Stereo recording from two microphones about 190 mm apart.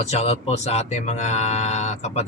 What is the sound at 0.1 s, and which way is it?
Speech, 35° left (ahead or behind).